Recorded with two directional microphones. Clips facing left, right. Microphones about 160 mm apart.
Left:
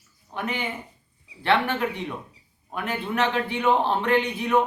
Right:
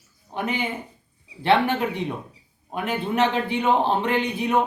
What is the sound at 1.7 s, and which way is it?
Speech, 25° right (ahead or behind).